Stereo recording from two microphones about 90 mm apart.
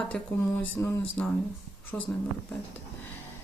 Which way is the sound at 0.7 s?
30° left (ahead or behind).